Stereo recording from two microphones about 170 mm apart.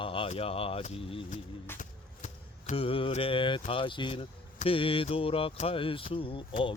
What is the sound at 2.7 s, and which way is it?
Speech, 35° left (ahead or behind).